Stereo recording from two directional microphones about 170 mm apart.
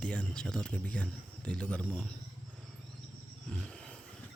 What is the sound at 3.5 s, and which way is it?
Roar, 5° left (ahead or behind).